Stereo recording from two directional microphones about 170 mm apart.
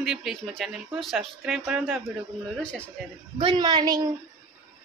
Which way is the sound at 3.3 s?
25° right (ahead or behind).